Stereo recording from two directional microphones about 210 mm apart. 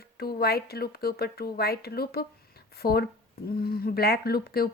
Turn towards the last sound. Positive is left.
turn(degrees=45)  # may be behind; listen again after turning